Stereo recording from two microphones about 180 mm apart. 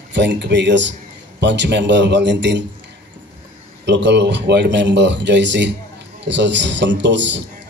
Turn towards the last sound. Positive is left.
turn(degrees=-85)